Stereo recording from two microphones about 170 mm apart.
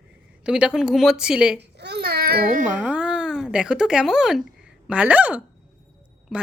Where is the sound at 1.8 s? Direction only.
75° right (ahead or behind).